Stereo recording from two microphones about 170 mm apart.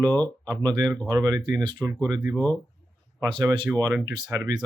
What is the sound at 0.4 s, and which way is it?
Speech, 25° right (ahead or behind).